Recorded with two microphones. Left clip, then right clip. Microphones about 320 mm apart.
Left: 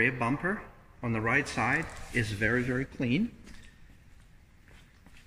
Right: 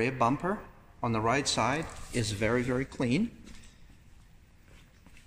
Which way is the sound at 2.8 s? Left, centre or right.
Centre.